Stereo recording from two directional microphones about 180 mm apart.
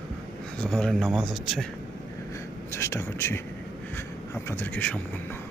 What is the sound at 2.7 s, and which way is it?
A man's voice, 15° left (ahead or behind).